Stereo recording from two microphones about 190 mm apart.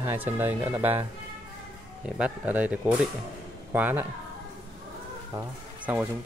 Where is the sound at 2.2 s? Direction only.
10° right (ahead or behind).